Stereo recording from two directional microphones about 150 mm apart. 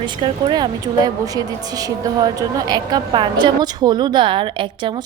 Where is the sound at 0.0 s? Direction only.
35° right (ahead or behind).